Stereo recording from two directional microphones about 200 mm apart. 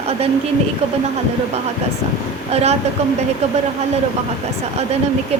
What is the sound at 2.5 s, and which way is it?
Speech, 30° right (ahead or behind).